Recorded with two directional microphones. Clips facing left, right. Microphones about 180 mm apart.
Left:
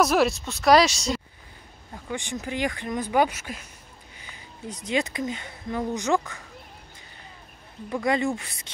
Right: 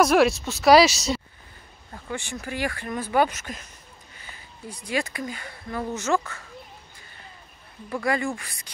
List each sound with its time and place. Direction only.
0.0 s speech: centre (ahead or behind)
2.0 s speech: 15° left (ahead or behind)
7.9 s speech: 20° left (ahead or behind)